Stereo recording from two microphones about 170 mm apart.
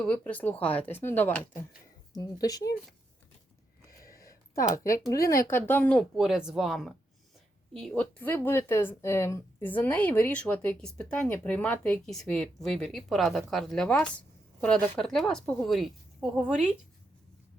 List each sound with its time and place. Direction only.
0.0 s speech: 5° left (ahead or behind)
2.1 s speech: 20° left (ahead or behind)
4.1 s speech: 20° left (ahead or behind); by 16.7 s 5° right (ahead or behind)